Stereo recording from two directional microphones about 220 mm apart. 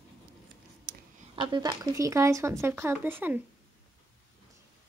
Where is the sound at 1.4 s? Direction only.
20° right (ahead or behind).